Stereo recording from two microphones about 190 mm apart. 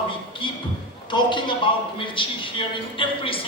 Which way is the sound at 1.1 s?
25° left (ahead or behind).